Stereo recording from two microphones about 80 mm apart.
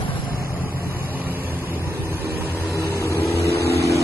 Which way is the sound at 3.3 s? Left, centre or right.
Left.